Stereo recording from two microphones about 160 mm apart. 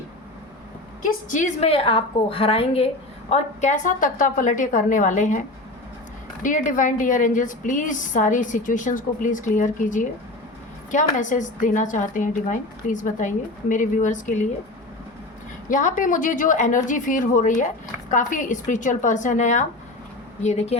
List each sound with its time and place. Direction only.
1.3 s a woman's voice: 50° left (ahead or behind)
15.7 s a woman's voice: 55° left (ahead or behind)